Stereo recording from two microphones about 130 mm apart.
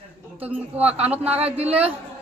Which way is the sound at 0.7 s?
50° right (ahead or behind).